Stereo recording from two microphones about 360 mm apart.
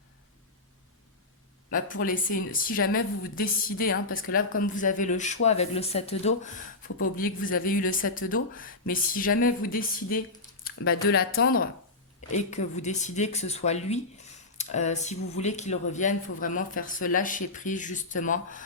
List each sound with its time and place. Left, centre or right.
1.7 s speech: left